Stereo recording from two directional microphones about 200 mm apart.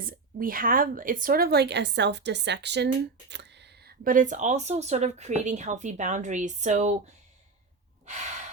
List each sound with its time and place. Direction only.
0.0 s speech: 45° right (ahead or behind)
8.0 s breathing: 35° right (ahead or behind)